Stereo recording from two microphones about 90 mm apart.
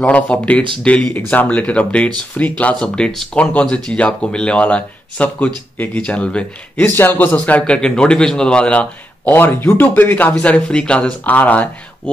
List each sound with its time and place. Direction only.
0.0 s speech: 15° left (ahead or behind)
7.0 s speech: 25° left (ahead or behind)